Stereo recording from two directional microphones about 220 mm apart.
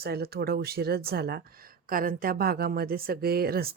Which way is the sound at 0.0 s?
45° right (ahead or behind).